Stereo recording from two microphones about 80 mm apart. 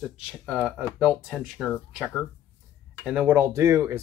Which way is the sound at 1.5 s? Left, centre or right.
Left.